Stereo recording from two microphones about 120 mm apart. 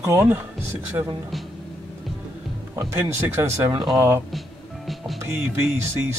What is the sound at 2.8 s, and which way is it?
Speech, 25° right (ahead or behind).